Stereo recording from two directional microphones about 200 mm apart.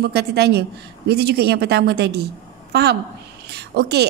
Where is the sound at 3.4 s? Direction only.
55° right (ahead or behind).